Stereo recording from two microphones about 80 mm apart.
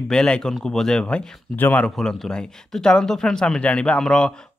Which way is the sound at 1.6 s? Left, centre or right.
Left.